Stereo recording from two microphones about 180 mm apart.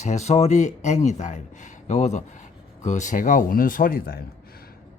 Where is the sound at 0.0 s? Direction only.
40° left (ahead or behind).